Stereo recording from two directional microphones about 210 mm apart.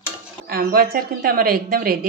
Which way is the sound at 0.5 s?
45° right (ahead or behind).